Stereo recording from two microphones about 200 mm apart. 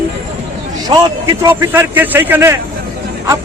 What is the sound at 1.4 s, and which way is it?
Speech, 10° right (ahead or behind).